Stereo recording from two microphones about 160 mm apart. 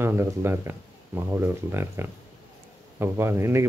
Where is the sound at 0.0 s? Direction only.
15° right (ahead or behind).